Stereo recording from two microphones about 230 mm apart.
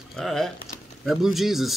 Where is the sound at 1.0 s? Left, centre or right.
Centre.